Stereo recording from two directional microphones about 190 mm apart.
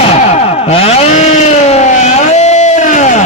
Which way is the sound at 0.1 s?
35° left (ahead or behind).